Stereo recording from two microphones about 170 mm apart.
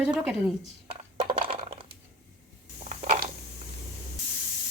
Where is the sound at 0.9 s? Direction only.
35° right (ahead or behind).